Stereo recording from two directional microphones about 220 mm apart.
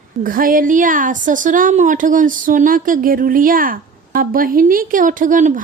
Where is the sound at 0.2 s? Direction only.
40° right (ahead or behind).